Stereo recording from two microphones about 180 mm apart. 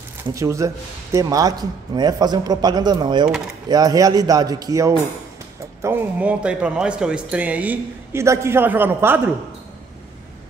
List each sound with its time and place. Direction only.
0.2 s a man's voice: 15° right (ahead or behind)